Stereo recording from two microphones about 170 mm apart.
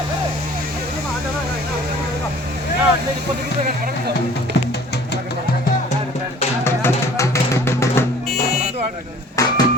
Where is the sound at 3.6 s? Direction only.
60° right (ahead or behind).